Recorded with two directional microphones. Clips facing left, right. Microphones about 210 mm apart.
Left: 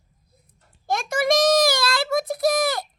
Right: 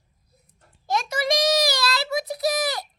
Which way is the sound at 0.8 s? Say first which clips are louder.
Left 3 dB; 50° left (ahead or behind).